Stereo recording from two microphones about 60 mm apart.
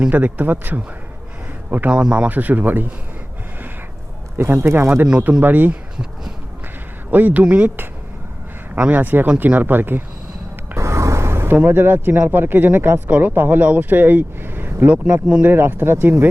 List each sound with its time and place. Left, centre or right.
0.1 s speech: right
1.9 s speech: centre
4.4 s speech: right
7.1 s speech: right
8.7 s speech: right
10.8 s a sound: right
11.5 s speech: right